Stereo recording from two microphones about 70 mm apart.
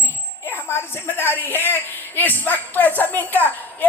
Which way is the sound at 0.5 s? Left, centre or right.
Left.